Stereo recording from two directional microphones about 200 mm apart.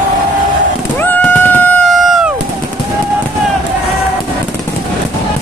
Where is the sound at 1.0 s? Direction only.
10° left (ahead or behind).